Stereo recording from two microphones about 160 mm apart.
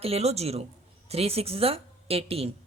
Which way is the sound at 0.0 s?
40° right (ahead or behind).